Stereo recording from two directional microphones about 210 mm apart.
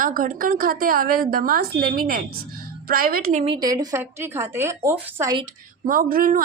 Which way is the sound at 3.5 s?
20° right (ahead or behind).